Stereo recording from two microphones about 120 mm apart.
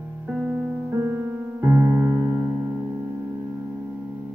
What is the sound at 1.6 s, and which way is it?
Music, 15° right (ahead or behind).